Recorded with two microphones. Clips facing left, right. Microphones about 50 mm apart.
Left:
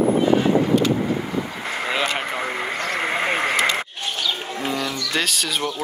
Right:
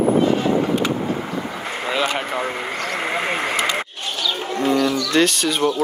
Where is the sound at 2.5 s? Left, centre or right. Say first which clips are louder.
Even; left.